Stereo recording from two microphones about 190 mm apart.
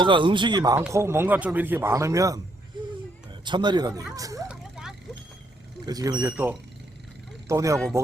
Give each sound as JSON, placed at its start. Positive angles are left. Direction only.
{"t": 0.0, "sound": "speech", "side_deg": -25}
{"t": 3.4, "sound": "speech", "side_deg": -25}
{"t": 4.4, "sound": "vehicle", "side_deg": -5}
{"t": 5.8, "sound": "speech", "side_deg": -20}
{"t": 6.2, "sound": "speech", "side_deg": -10}